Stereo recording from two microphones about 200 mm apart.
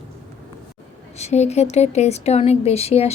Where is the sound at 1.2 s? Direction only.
35° left (ahead or behind).